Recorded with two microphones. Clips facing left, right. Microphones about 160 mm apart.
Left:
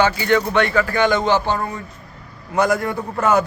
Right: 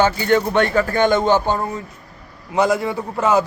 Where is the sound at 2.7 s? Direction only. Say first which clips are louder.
Even; 10° right (ahead or behind).